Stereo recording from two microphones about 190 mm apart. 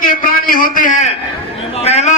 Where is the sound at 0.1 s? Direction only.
50° left (ahead or behind).